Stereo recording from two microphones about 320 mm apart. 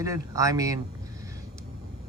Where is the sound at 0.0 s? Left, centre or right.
Centre.